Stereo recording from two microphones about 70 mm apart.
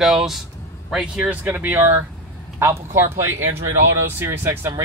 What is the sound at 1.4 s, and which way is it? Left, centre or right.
Speech, right.